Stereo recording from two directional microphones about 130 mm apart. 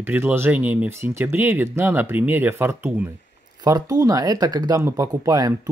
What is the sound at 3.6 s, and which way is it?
Speech, 30° right (ahead or behind).